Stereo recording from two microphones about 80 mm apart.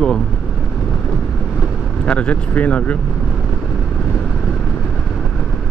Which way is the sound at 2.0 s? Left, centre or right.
Centre.